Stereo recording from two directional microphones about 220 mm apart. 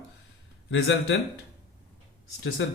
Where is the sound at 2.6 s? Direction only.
55° left (ahead or behind).